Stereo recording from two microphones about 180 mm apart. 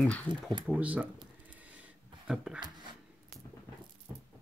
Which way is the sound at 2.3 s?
5° right (ahead or behind).